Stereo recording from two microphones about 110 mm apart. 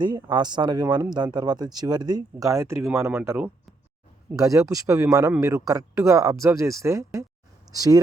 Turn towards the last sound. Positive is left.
turn(degrees=-35)  # may be behind; listen again after turning